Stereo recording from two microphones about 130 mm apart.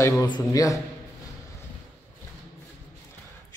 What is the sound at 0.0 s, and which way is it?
Speech, 20° left (ahead or behind).